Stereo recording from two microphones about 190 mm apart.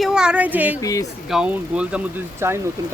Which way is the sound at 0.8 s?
20° left (ahead or behind).